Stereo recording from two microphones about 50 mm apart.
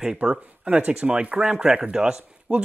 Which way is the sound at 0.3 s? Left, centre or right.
Centre.